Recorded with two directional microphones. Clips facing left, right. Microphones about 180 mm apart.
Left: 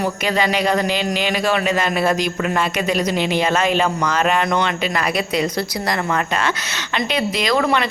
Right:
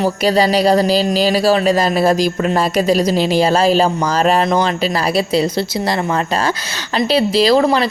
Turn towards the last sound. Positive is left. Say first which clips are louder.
# right 6 dB
turn(degrees=-30)  # may be behind; listen again after turning